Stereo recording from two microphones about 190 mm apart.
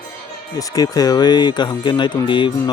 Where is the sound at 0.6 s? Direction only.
20° left (ahead or behind).